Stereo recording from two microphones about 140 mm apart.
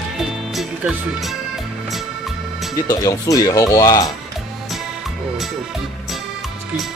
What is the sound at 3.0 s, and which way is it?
Speech, 25° left (ahead or behind).